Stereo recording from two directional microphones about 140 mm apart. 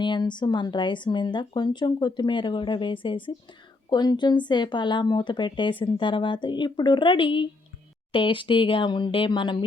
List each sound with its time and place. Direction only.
0.0 s speech: 35° left (ahead or behind)